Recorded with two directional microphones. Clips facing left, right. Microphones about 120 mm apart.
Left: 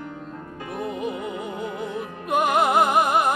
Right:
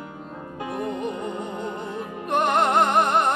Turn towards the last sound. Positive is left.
turn(degrees=5)  # may be behind; listen again after turning